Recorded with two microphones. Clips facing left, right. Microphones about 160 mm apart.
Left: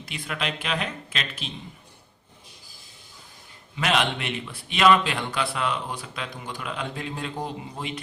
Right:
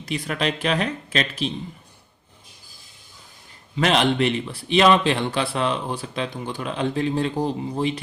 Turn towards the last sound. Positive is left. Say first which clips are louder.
# right 9 dB
turn(degrees=-35)  # may be behind; listen again after turning